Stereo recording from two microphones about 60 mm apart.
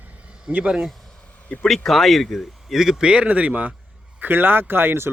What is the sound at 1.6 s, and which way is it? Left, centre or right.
Speech, centre.